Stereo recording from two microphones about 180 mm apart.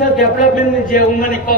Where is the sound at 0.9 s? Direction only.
50° left (ahead or behind).